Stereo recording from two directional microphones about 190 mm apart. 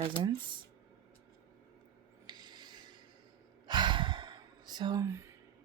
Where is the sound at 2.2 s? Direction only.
20° right (ahead or behind).